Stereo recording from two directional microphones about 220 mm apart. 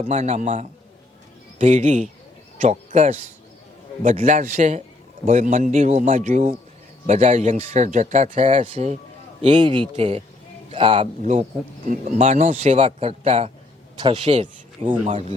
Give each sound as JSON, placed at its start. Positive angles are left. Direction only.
{"t": 0.0, "sound": "speech", "side_deg": -30}